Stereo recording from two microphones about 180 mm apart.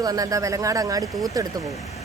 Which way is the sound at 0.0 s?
20° right (ahead or behind).